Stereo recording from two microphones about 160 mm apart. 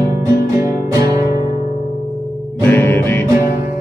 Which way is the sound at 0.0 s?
20° right (ahead or behind).